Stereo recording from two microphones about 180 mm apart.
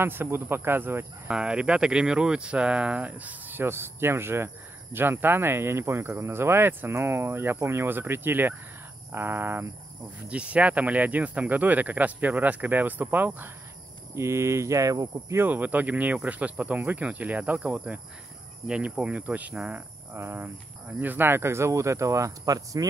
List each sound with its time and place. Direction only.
0.0 s speech: 10° right (ahead or behind)